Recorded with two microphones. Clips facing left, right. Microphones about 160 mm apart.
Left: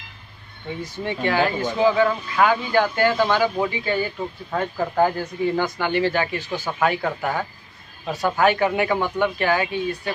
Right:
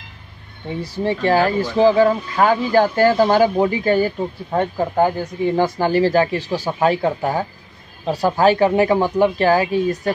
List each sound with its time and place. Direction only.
0.7 s speech: 35° right (ahead or behind)
4.5 s speech: 25° right (ahead or behind)
5.8 s speech: 35° right (ahead or behind)